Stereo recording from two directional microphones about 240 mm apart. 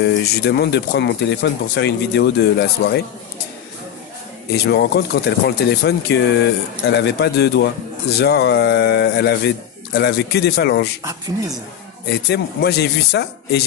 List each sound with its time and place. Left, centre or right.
0.0 s speech: left
4.6 s speech: left
12.1 s speech: left